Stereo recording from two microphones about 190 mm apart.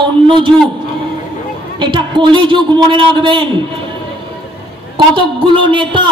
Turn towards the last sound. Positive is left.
turn(degrees=-25)  # may be behind; listen again after turning